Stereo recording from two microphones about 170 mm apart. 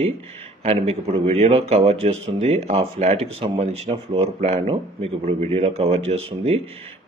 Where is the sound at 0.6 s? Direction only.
40° right (ahead or behind).